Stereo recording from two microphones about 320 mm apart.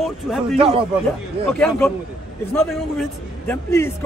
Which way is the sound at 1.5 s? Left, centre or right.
Centre.